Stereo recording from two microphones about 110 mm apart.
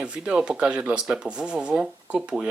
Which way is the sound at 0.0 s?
10° right (ahead or behind).